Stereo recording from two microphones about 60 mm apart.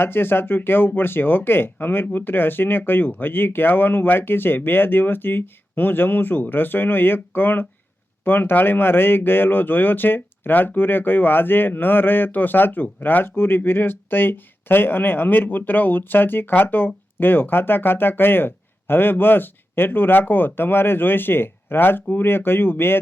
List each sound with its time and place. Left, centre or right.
0.0 s speech: left